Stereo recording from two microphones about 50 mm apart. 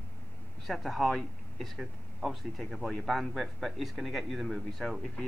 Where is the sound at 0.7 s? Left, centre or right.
Centre.